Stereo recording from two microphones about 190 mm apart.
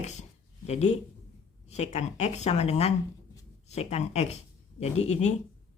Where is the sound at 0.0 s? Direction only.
35° left (ahead or behind).